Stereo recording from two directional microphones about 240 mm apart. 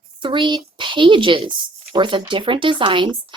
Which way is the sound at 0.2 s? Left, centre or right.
Centre.